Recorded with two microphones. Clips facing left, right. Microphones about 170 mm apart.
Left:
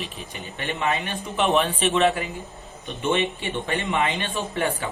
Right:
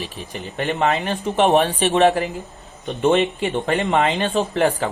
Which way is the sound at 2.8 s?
60° right (ahead or behind).